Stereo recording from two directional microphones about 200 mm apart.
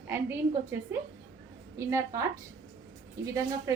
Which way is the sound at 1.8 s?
15° right (ahead or behind).